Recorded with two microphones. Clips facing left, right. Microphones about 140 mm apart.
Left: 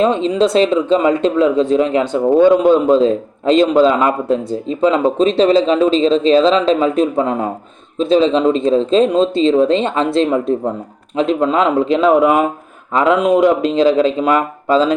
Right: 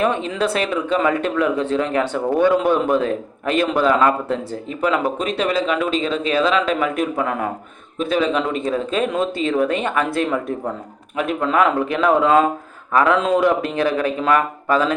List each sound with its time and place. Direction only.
0.0 s a man's voice: 20° left (ahead or behind)